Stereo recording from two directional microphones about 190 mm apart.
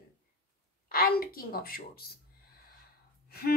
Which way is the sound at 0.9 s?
50° left (ahead or behind).